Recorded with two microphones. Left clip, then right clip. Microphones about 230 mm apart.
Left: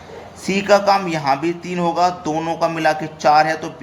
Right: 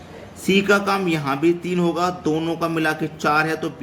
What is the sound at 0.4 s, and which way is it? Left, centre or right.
A man's voice, centre.